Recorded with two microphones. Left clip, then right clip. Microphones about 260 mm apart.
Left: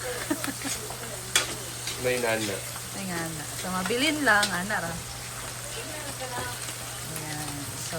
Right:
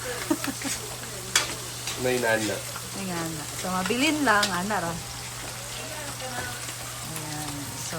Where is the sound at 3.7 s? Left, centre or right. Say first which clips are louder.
Right 1 dB; centre.